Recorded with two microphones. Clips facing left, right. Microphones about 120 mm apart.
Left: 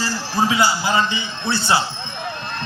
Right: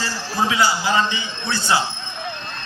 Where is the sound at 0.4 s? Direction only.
30° left (ahead or behind).